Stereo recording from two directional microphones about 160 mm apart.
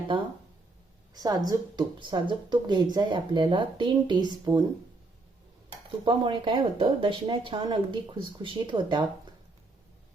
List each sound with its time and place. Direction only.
1.1 s speech: 25° right (ahead or behind)
6.1 s speech: 30° right (ahead or behind)